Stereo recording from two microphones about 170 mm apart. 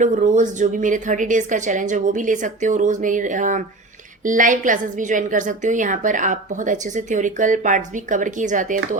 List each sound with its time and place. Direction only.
0.0 s a woman's voice: 50° right (ahead or behind)